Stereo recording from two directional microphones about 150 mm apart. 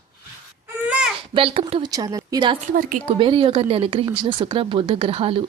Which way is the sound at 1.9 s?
25° right (ahead or behind).